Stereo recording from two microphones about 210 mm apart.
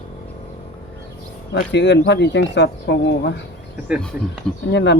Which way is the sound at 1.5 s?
55° left (ahead or behind).